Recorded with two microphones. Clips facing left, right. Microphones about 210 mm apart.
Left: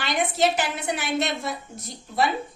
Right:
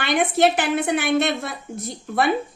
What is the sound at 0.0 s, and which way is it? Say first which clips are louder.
A woman's voice: right 5 dB; 60° right (ahead or behind).